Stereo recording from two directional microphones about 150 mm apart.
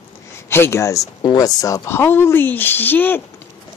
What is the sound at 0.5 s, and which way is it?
Speech, 15° left (ahead or behind).